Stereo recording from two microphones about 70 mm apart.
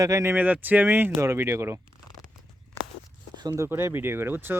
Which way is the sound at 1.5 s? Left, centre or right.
Right.